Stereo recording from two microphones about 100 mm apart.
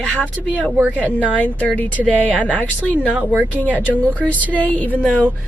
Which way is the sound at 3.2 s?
15° right (ahead or behind).